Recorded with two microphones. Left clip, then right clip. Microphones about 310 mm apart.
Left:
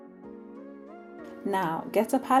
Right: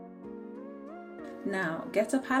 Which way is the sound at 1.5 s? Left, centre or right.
Left.